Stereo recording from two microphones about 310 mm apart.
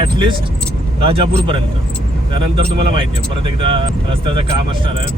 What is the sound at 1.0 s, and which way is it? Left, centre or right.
Speech, centre.